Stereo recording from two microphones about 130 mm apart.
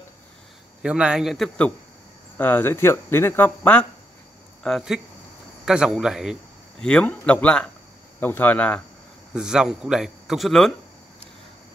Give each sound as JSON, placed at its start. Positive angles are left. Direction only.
{"t": 0.8, "sound": "a man's voice", "side_deg": -10}
{"t": 2.3, "sound": "speech", "side_deg": 15}
{"t": 4.6, "sound": "a man's voice", "side_deg": 0}
{"t": 9.3, "sound": "a man's voice", "side_deg": -5}